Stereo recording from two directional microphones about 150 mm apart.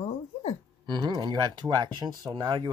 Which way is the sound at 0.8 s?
30° right (ahead or behind).